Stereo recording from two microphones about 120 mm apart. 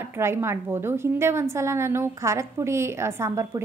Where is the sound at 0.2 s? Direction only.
20° right (ahead or behind).